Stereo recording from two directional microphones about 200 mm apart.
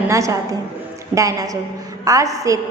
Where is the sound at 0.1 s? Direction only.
15° right (ahead or behind).